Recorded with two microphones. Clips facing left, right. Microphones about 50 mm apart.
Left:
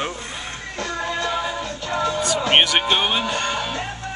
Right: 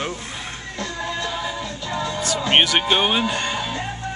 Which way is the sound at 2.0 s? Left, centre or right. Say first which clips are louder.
Left 3 dB; centre.